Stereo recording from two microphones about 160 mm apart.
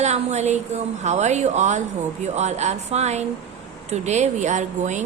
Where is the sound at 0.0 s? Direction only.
45° right (ahead or behind).